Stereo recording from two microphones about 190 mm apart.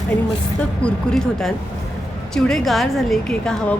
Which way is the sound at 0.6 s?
5° left (ahead or behind).